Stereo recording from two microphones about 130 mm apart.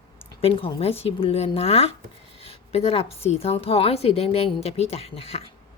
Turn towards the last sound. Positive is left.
turn(degrees=50)  # may be behind; listen again after turning